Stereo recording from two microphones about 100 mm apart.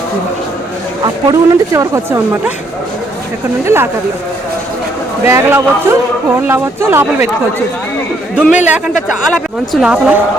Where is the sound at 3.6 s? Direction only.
25° right (ahead or behind).